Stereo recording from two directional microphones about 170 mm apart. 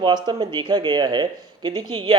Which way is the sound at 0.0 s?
25° right (ahead or behind).